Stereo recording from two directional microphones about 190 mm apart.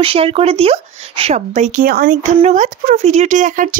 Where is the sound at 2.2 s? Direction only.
35° right (ahead or behind).